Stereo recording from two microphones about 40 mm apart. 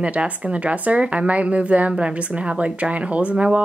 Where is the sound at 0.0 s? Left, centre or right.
Right.